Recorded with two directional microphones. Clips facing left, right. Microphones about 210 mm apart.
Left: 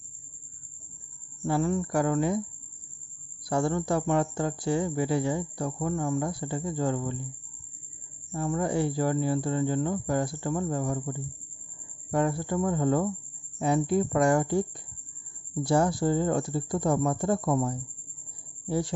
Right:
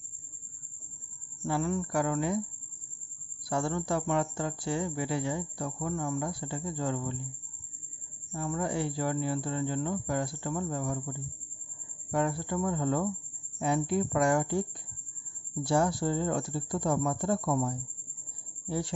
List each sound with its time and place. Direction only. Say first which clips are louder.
1.5 s speech: left 4 dB; 40° left (ahead or behind)
3.4 s speech: left 4 dB; 40° left (ahead or behind)
8.3 s speech: left 4 dB; 40° left (ahead or behind)